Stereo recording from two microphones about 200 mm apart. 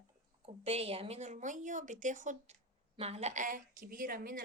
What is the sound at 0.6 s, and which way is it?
Speech, 30° right (ahead or behind).